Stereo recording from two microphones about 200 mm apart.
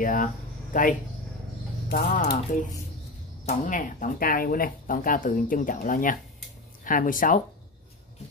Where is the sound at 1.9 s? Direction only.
50° left (ahead or behind).